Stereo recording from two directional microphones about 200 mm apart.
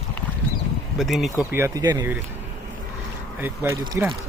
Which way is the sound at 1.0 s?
Centre (ahead or behind).